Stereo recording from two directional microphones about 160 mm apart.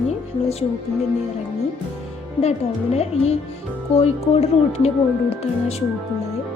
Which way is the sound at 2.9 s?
40° left (ahead or behind).